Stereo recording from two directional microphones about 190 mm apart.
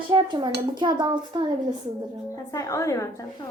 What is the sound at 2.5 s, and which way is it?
Speech, 15° left (ahead or behind).